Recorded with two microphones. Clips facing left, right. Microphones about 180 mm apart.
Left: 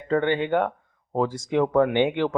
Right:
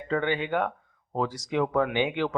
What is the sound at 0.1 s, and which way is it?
Speech, 55° left (ahead or behind).